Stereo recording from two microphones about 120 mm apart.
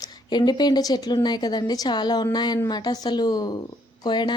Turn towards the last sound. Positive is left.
turn(degrees=40)  # may be behind; listen again after turning